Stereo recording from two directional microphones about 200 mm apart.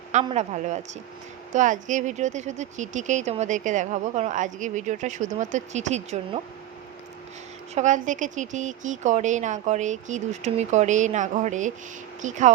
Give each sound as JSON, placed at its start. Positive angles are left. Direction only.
{"t": 0.3, "sound": "speech", "side_deg": -35}
{"t": 7.8, "sound": "speech", "side_deg": -40}